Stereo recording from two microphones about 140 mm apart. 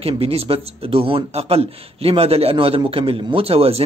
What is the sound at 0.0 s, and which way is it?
Speech, 45° right (ahead or behind).